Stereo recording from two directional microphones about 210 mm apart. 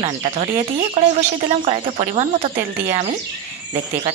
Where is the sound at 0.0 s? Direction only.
25° right (ahead or behind).